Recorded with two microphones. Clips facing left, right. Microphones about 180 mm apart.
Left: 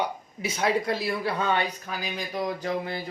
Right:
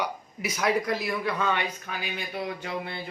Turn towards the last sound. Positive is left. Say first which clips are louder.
# left 4 dB
turn(degrees=40)  # may be behind; listen again after turning